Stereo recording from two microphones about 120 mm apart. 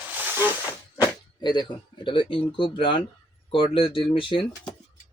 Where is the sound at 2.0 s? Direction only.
45° left (ahead or behind).